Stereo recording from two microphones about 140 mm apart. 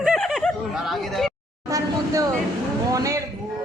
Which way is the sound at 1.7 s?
25° right (ahead or behind).